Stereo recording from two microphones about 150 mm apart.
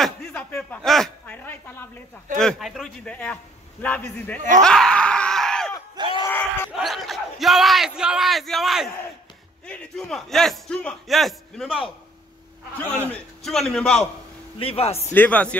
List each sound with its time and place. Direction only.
0.0 s a sound: 5° left (ahead or behind)
2.3 s a man's voice: centre (ahead or behind)
4.4 s speech: 55° right (ahead or behind)
4.6 s screaming: 5° left (ahead or behind)
5.9 s a sound: 30° right (ahead or behind)
6.2 s a sound: 15° left (ahead or behind)
6.7 s a man's voice: centre (ahead or behind)
12.7 s a man's voice: 10° left (ahead or behind)
14.6 s a man's voice: 40° left (ahead or behind)
15.1 s a man's voice: 10° left (ahead or behind)